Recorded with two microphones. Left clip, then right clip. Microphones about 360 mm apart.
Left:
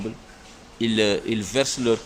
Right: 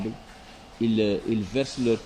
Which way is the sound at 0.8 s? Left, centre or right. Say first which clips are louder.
Left 3 dB; left.